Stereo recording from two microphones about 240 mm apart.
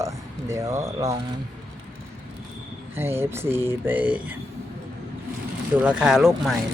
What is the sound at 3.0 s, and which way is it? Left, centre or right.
Speech, centre.